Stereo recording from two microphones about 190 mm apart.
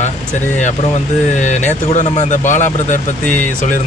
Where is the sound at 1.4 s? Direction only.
40° left (ahead or behind).